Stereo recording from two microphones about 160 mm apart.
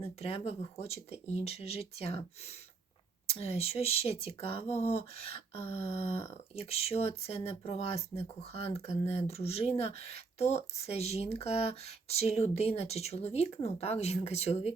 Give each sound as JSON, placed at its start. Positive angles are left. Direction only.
{"t": 0.0, "sound": "speech", "side_deg": 40}
{"t": 3.3, "sound": "speech", "side_deg": 40}